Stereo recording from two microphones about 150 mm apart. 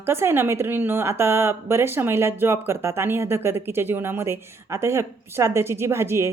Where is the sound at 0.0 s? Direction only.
15° right (ahead or behind).